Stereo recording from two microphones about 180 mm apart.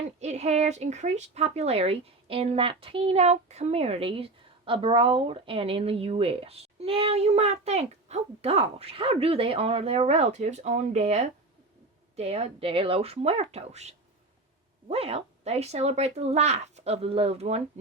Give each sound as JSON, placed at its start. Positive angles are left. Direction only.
{"t": 0.2, "sound": "speech", "side_deg": -40}